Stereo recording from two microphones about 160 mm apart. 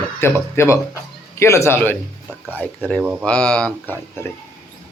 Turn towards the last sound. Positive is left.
turn(degrees=5)  # may be behind; listen again after turning